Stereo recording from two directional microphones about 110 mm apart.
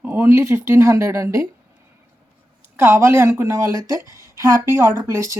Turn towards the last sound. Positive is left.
turn(degrees=-25)  # may be behind; listen again after turning